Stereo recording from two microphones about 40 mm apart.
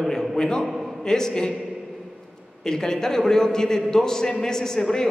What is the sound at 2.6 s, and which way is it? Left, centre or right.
A man's voice, centre.